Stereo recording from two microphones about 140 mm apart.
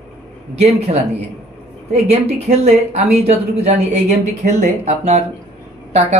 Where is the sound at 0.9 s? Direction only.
55° right (ahead or behind).